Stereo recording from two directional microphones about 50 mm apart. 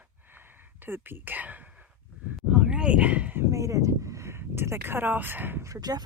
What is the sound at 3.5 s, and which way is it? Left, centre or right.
Speech, right.